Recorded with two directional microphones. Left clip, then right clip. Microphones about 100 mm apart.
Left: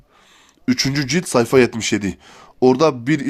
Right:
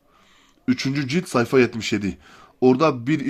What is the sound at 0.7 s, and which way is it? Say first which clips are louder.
Speech: left 4 dB; 60° left (ahead or behind).